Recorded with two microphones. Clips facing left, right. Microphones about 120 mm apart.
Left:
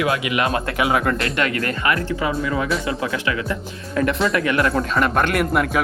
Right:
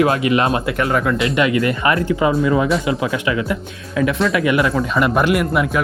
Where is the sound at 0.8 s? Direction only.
5° left (ahead or behind).